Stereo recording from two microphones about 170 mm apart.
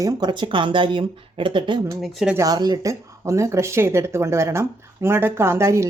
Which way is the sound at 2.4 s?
25° right (ahead or behind).